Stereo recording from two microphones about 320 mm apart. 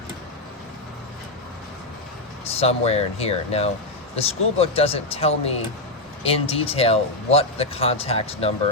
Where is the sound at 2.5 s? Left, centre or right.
Centre.